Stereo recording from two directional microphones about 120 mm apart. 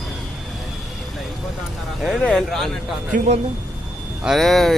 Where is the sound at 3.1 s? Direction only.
85° right.